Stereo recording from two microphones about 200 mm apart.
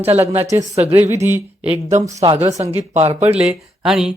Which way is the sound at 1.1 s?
10° right (ahead or behind).